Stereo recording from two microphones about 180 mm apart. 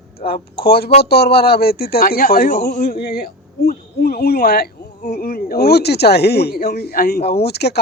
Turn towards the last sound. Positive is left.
turn(degrees=65)  # may be behind; listen again after turning